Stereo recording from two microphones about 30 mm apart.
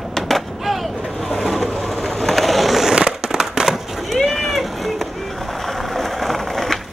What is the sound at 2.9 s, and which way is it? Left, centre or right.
Fireworks, right.